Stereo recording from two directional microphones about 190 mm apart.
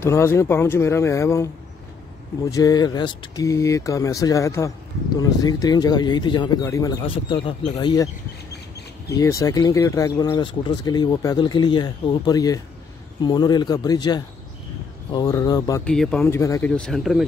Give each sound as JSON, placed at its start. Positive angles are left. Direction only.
{"t": 0.0, "sound": "speech", "side_deg": 15}
{"t": 2.5, "sound": "speech", "side_deg": 20}
{"t": 9.1, "sound": "speech", "side_deg": 15}
{"t": 15.8, "sound": "speech", "side_deg": 5}
{"t": 16.7, "sound": "speech", "side_deg": 5}